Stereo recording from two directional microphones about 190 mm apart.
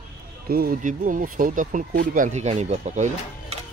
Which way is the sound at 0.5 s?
50° right (ahead or behind).